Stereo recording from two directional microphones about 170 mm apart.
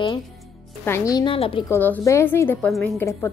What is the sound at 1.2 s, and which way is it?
Speech, 30° left (ahead or behind).